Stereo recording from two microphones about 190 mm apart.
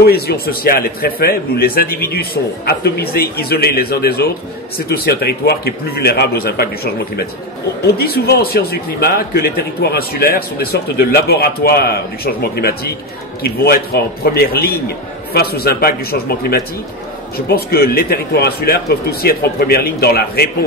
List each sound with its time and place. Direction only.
0.0 s a man's voice: 55° left (ahead or behind)
14.2 s speech: 55° left (ahead or behind)